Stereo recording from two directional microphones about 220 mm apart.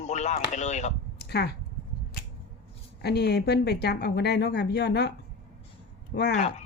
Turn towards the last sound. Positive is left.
turn(degrees=35)  # may be behind; listen again after turning